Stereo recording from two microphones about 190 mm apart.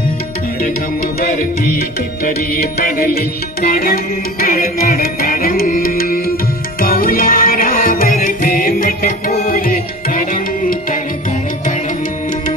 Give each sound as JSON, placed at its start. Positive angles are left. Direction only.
{"t": 1.2, "sound": "music", "side_deg": 50}